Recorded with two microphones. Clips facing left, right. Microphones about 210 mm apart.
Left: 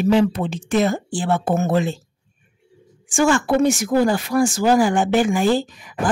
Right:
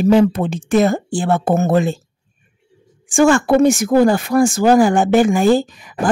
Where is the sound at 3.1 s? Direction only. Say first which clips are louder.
Right 5 dB; 50° right (ahead or behind).